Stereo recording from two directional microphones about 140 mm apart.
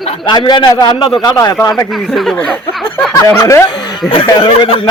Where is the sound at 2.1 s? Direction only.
Centre (ahead or behind).